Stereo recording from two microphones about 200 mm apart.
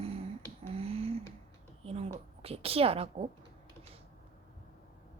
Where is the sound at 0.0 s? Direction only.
30° right (ahead or behind).